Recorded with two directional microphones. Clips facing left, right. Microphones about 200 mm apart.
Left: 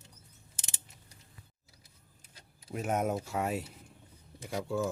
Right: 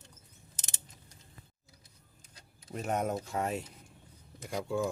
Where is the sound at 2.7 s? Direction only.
5° left (ahead or behind).